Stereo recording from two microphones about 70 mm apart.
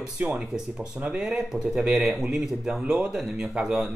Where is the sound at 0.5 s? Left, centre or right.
Centre.